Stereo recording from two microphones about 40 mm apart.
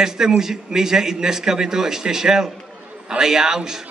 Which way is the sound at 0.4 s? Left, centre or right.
Centre.